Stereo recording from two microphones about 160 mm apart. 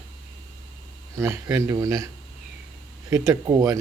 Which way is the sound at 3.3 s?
20° right (ahead or behind).